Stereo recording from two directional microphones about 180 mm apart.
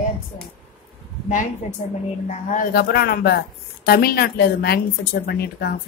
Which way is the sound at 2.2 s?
45° left (ahead or behind).